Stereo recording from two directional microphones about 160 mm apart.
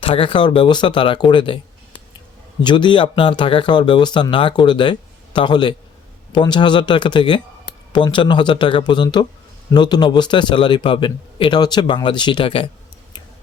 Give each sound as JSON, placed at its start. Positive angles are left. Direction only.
{"t": 0.0, "sound": "speech", "side_deg": 35}